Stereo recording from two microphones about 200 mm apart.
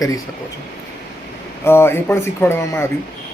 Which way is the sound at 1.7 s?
10° left (ahead or behind).